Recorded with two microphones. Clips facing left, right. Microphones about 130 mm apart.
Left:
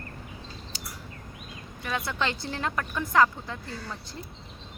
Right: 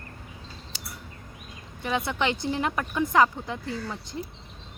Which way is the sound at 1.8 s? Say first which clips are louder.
Right 3 dB; 20° right (ahead or behind).